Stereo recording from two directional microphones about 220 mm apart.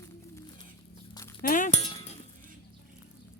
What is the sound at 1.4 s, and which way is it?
Music, 35° left (ahead or behind).